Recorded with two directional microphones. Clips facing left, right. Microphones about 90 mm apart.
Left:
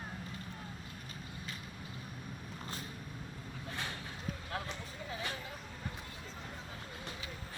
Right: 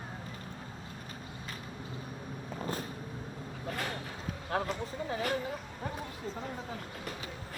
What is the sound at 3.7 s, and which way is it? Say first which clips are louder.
Vehicle: right 6 dB; 50° right (ahead or behind).